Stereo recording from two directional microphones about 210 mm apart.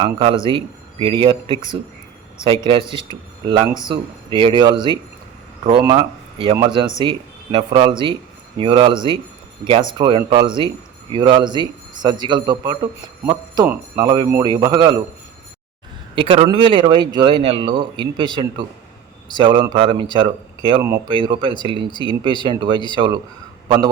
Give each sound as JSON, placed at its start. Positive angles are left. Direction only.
{"t": 0.0, "sound": "a man's voice", "side_deg": -25}
{"t": 16.1, "sound": "a man's voice", "side_deg": -25}